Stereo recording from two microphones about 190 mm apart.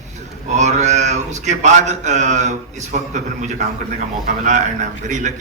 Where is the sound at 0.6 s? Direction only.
35° right (ahead or behind).